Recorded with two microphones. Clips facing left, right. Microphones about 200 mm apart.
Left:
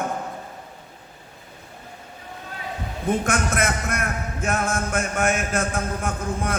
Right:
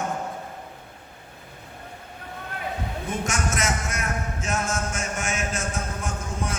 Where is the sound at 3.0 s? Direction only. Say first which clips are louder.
Left 7 dB; 55° left (ahead or behind).